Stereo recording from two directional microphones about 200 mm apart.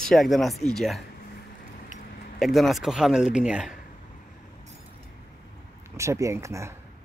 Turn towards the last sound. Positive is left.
turn(degrees=-15)  # may be behind; listen again after turning